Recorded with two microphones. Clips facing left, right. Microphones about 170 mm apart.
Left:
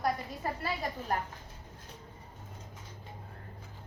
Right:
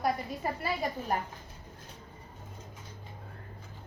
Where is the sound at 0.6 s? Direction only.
10° right (ahead or behind).